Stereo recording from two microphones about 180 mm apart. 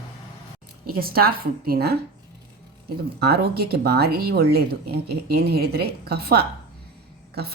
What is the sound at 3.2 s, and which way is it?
Speech, 65° right (ahead or behind).